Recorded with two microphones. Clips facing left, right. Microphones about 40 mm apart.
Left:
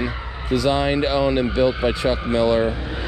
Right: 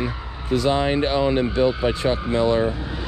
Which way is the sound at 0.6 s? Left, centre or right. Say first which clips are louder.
Left 1 dB; left.